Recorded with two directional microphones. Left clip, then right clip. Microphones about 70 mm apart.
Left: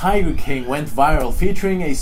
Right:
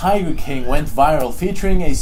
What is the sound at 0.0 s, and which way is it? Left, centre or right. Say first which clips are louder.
Speech: right 1 dB; right.